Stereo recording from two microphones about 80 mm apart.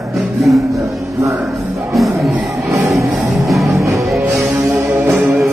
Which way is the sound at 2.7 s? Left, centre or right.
Right.